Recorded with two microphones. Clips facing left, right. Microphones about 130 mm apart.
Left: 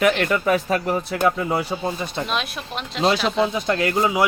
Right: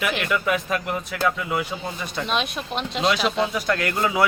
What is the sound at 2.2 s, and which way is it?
Speech, centre (ahead or behind).